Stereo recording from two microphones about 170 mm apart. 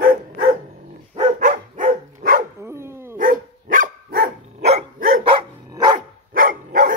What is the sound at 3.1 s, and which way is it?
Dog, 55° right (ahead or behind).